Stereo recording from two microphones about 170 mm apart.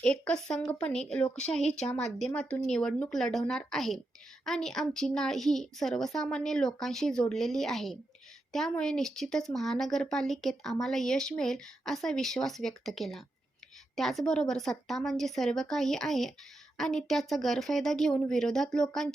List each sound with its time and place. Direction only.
0.0 s speech: 5° left (ahead or behind)
1.6 s speech: 40° left (ahead or behind)
2.1 s speech: 5° left (ahead or behind)